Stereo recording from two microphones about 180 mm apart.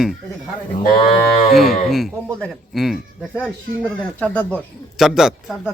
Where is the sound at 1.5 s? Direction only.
Centre (ahead or behind).